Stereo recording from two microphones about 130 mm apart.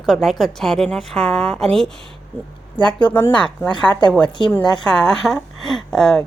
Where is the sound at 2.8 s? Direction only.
35° left (ahead or behind).